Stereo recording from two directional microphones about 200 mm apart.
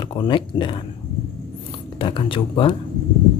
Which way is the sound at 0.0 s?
25° left (ahead or behind).